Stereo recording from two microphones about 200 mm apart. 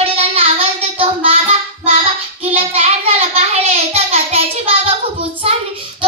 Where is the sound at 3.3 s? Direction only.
30° right (ahead or behind).